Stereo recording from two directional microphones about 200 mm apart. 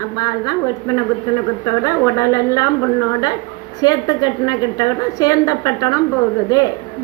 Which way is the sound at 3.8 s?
20° left (ahead or behind).